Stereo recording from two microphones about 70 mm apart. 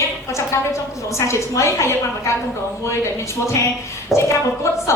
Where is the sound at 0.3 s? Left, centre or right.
Left.